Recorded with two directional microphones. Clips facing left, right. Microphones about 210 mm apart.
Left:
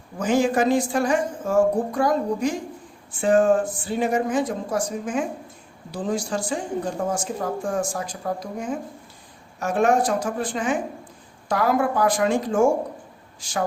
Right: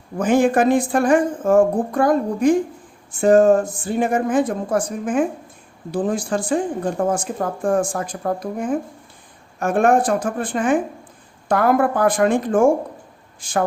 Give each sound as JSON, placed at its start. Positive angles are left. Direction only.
{"t": 0.2, "sound": "speech", "side_deg": -55}
{"t": 3.1, "sound": "speech", "side_deg": -45}